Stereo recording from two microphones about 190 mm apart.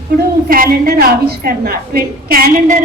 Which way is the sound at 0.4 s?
50° right (ahead or behind).